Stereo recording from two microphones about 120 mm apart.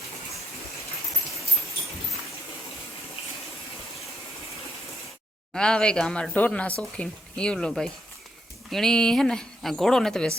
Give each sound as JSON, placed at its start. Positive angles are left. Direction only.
{"t": 5.5, "sound": "speech", "side_deg": 5}